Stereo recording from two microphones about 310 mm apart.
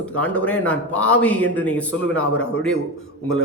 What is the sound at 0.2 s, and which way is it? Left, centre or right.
A man's voice, centre.